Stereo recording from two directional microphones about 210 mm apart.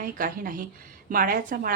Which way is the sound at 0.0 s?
45° right (ahead or behind).